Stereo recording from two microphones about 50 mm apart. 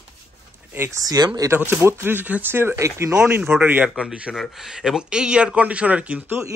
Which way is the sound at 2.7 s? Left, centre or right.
Right.